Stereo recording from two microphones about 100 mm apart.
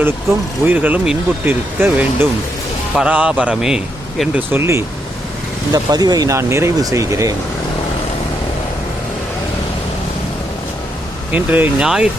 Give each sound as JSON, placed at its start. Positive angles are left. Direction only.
{"t": 0.0, "sound": "speech", "side_deg": -20}
{"t": 4.4, "sound": "speech", "side_deg": -25}
{"t": 5.7, "sound": "speech", "side_deg": -40}
{"t": 11.3, "sound": "speech", "side_deg": -15}